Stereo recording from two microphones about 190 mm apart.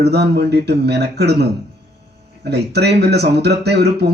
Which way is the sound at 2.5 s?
60° right (ahead or behind).